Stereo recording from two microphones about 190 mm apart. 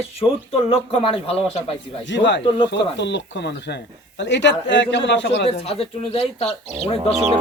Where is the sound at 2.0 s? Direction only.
70° left (ahead or behind).